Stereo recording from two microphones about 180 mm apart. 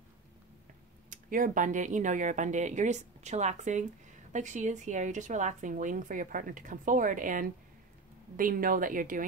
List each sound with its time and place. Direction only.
1.1 s speech: 45° right (ahead or behind)